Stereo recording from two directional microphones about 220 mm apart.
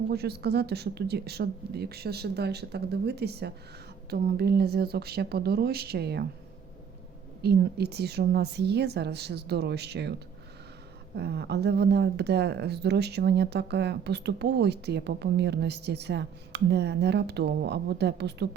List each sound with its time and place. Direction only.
0.1 s speech: 45° right (ahead or behind)
7.4 s speech: 45° right (ahead or behind)